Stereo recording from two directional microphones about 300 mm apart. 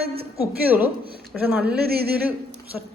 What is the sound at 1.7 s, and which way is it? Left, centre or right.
Speech, right.